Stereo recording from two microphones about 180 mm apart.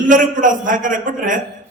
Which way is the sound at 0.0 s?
45° right (ahead or behind).